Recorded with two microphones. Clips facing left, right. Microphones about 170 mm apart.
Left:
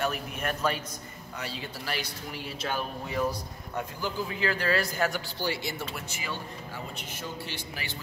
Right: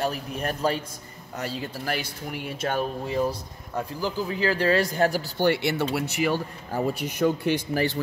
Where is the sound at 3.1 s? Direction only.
30° right (ahead or behind).